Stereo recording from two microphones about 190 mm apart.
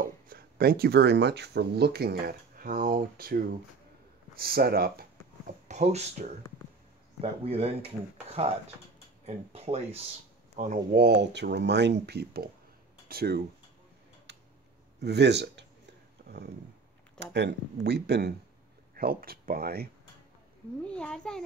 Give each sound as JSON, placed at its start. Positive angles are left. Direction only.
{"t": 0.3, "sound": "speech", "side_deg": -55}
{"t": 5.7, "sound": "speech", "side_deg": -35}
{"t": 11.0, "sound": "speech", "side_deg": -60}
{"t": 14.3, "sound": "tick-tock", "side_deg": -65}
{"t": 15.0, "sound": "speech", "side_deg": -60}
{"t": 16.2, "sound": "a sound", "side_deg": -50}
{"t": 17.2, "sound": "speech", "side_deg": -65}
{"t": 20.8, "sound": "a child's voice", "side_deg": 5}